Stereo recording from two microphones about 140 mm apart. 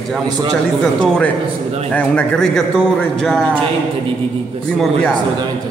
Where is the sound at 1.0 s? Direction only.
5° left (ahead or behind).